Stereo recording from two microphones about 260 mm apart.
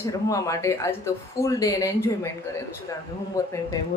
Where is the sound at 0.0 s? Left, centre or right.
Centre.